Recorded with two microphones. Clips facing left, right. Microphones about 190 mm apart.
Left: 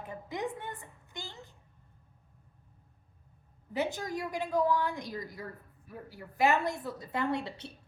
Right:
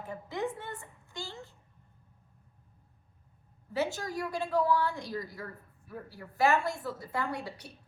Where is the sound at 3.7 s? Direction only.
20° left (ahead or behind).